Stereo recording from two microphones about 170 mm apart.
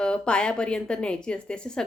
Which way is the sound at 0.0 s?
5° left (ahead or behind).